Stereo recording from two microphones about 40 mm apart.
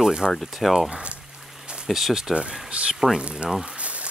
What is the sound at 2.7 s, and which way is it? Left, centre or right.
Speech, right.